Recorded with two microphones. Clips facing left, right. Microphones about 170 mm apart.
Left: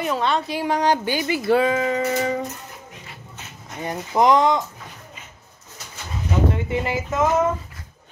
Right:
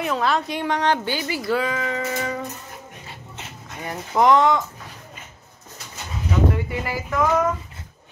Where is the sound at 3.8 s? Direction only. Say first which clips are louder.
Even; 20° left (ahead or behind).